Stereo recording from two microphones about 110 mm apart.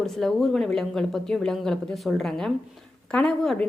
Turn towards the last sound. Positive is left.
turn(degrees=5)  # may be behind; listen again after turning